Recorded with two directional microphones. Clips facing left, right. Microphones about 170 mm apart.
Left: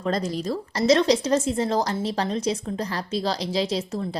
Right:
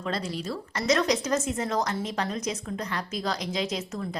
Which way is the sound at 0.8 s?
30° left (ahead or behind).